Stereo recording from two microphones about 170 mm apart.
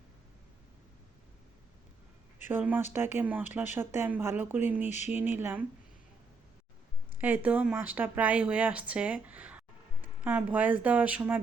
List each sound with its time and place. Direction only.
2.5 s speech: 10° right (ahead or behind)
4.9 s speech: 40° left (ahead or behind)
5.1 s speech: 10° right (ahead or behind)
7.2 s speech: 10° right (ahead or behind)